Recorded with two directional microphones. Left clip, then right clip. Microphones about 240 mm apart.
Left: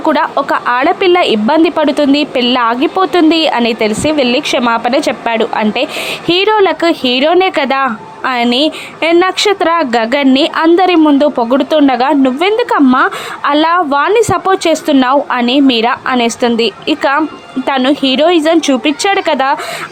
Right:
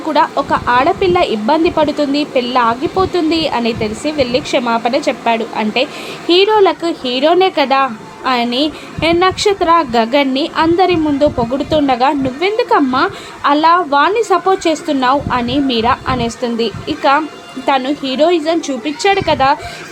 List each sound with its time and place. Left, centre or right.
0.1 s a woman's voice: left